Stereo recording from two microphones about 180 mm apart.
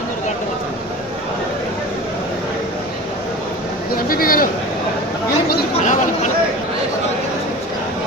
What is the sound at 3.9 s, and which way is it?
Speech, 55° left (ahead or behind).